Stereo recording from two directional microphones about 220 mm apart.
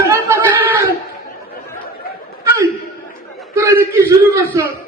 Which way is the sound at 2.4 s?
15° right (ahead or behind).